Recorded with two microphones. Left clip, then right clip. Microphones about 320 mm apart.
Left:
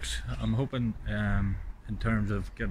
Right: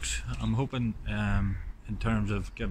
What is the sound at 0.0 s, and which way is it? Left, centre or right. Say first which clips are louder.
Speech: right 1 dB; centre.